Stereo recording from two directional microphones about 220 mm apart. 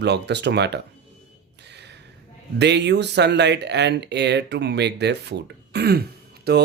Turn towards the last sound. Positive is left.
turn(degrees=-50)  # may be behind; listen again after turning